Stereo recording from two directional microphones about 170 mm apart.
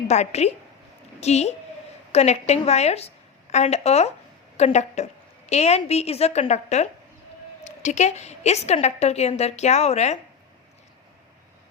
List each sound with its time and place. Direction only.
0.1 s a woman's voice: 40° left (ahead or behind)